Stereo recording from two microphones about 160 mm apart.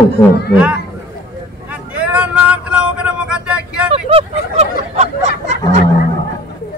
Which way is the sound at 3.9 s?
35° right (ahead or behind).